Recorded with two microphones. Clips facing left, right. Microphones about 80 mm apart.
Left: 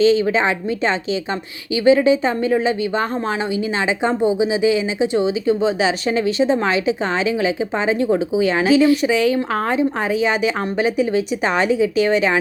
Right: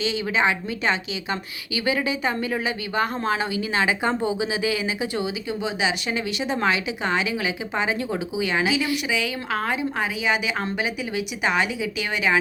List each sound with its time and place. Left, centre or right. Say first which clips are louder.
0.0 s speech: left 8 dB; left